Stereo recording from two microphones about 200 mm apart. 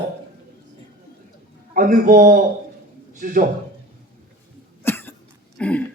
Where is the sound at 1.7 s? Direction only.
40° right (ahead or behind).